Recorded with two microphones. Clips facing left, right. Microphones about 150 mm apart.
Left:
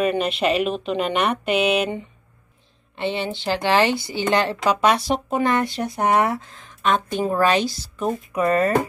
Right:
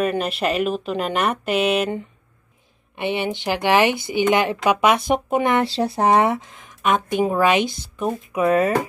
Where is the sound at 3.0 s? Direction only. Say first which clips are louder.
Right 2 dB; 15° right (ahead or behind).